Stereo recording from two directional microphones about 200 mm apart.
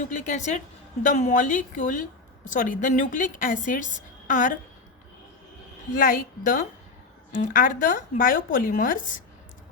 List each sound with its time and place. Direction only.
0.0 s a woman's voice: 40° left (ahead or behind)
5.9 s a woman's voice: 45° left (ahead or behind)